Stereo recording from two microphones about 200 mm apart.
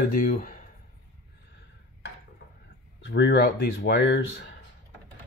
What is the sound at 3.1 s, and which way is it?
Speech, 60° left (ahead or behind).